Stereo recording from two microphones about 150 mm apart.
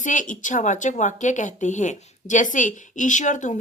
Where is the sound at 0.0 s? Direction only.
60° left (ahead or behind).